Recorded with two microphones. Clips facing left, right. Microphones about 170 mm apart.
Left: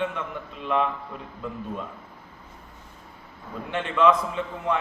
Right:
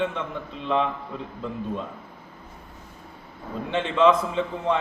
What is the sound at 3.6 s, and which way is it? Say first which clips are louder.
A man's voice: right 2 dB; 25° right (ahead or behind).